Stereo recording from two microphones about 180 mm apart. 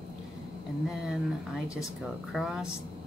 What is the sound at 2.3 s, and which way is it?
Speech, centre (ahead or behind).